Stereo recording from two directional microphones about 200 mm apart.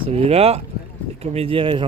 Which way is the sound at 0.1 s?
30° right (ahead or behind).